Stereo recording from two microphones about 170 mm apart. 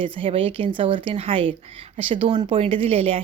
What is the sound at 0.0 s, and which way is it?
Speech, 30° right (ahead or behind).